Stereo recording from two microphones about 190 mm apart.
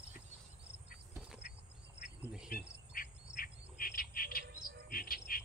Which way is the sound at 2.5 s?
50° left (ahead or behind).